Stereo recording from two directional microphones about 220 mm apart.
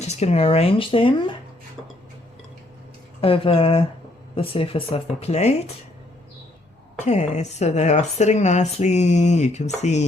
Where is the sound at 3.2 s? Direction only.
25° left (ahead or behind).